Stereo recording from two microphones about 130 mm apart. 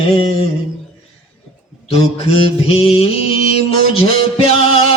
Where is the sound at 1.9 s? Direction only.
50° left (ahead or behind).